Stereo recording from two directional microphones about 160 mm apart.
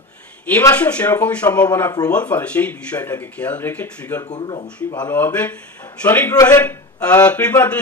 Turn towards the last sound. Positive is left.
turn(degrees=10)  # may be behind; listen again after turning